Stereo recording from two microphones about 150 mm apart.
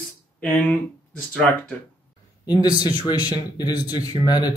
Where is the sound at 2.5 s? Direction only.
25° left (ahead or behind).